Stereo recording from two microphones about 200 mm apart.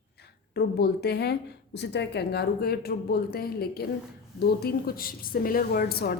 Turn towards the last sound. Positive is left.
turn(degrees=50)  # may be behind; listen again after turning